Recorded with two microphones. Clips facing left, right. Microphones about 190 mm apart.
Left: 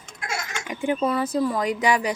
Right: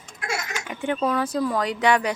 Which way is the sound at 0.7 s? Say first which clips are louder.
Left 1 dB; 10° left (ahead or behind).